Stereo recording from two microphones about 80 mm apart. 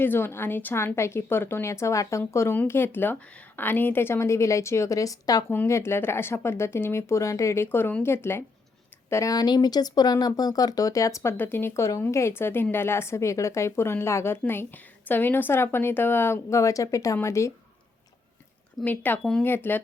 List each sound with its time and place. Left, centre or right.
0.0 s a woman's voice: left
5.6 s a woman's voice: left
9.3 s a woman's voice: left
18.9 s a woman's voice: left